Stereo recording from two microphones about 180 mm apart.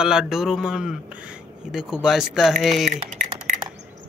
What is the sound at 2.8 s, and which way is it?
Speech, 45° right (ahead or behind).